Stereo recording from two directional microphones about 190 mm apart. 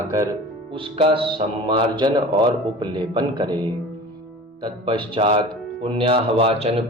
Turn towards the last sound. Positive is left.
turn(degrees=-30)  # may be behind; listen again after turning